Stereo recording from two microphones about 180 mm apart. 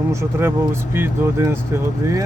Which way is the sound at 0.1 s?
15° right (ahead or behind).